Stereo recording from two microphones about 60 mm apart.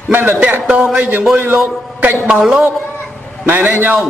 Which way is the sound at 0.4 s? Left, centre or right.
Right.